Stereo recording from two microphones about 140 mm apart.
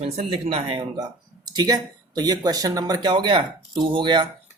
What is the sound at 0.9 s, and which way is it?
Speech, 25° right (ahead or behind).